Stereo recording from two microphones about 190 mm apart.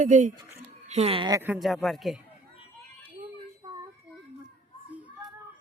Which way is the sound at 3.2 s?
25° right (ahead or behind).